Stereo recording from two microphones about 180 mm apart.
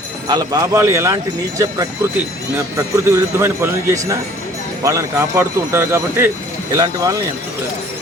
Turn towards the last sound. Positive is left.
turn(degrees=-20)  # may be behind; listen again after turning